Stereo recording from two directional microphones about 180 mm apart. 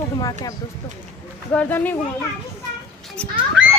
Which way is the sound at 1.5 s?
10° left (ahead or behind).